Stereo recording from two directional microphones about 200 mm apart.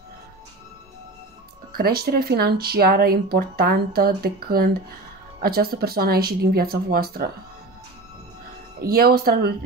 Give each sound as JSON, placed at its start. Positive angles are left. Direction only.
{"t": 1.7, "sound": "speech", "side_deg": -50}
{"t": 8.8, "sound": "speech", "side_deg": -50}